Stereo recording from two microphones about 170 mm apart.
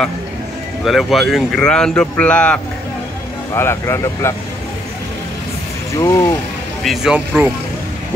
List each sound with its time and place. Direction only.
0.8 s speech: centre (ahead or behind); by 4.4 s 15° left (ahead or behind)
5.9 s speech: 15° left (ahead or behind)
6.8 s speech: centre (ahead or behind)